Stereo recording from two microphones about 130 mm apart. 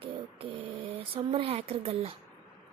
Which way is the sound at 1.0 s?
45° right (ahead or behind).